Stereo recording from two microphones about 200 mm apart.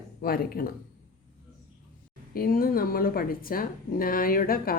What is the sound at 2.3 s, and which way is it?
Speech, 45° left (ahead or behind).